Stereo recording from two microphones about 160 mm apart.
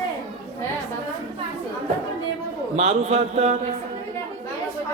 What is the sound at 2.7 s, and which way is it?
Speech, 40° right (ahead or behind).